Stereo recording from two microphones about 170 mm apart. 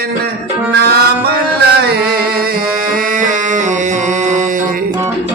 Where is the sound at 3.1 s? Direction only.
50° right (ahead or behind).